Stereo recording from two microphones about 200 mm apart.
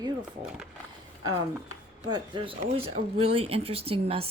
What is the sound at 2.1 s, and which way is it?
Speech, 25° right (ahead or behind).